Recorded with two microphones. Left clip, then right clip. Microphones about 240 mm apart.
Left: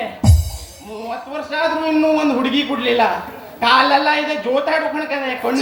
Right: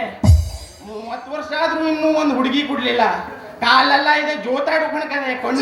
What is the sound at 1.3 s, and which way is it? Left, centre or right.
A woman's voice, right.